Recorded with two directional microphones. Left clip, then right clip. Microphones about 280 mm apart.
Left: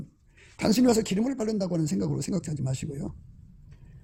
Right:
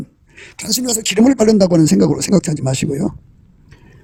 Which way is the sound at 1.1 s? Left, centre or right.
Right.